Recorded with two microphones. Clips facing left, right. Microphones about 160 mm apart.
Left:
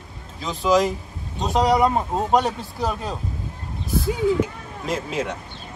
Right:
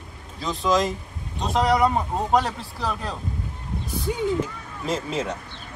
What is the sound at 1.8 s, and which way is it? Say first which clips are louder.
Speech: left 2 dB; 20° left (ahead or behind).